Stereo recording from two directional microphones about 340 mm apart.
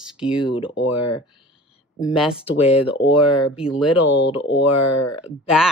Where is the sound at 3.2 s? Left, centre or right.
Left.